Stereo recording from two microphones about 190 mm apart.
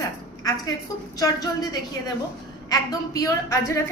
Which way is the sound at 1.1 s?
20° left (ahead or behind).